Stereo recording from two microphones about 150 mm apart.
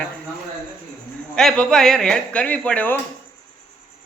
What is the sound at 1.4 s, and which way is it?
Speech, 5° left (ahead or behind).